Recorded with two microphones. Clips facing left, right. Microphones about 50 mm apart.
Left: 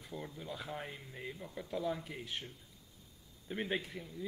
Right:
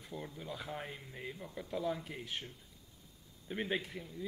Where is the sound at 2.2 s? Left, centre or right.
Right.